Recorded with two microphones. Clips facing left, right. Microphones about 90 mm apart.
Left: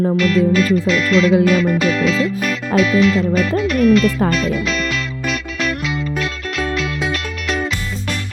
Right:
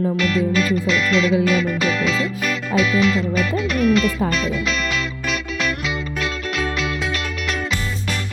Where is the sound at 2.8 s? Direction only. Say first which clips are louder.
Left 4 dB; centre (ahead or behind).